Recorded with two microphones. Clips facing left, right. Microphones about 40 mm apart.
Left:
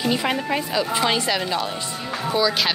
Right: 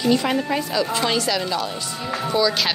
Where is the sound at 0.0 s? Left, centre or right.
Centre.